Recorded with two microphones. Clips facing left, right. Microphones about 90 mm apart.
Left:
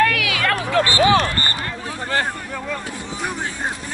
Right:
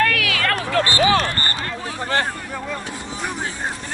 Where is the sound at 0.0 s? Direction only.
20° left (ahead or behind).